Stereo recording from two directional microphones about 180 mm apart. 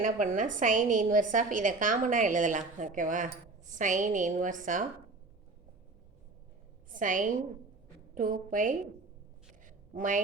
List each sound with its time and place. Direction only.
0.0 s a woman's voice: 45° right (ahead or behind)
6.9 s a woman's voice: 50° right (ahead or behind)
9.6 s a sound: 45° right (ahead or behind)